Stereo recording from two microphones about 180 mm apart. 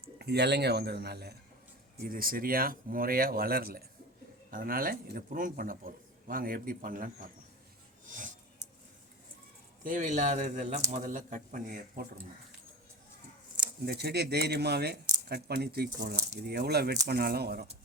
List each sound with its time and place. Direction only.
0.0 s speech: 65° right (ahead or behind)
2.0 s speech: 50° right (ahead or behind)
8.0 s snort: 45° right (ahead or behind)
9.8 s speech: 45° right (ahead or behind)
13.8 s speech: 65° right (ahead or behind)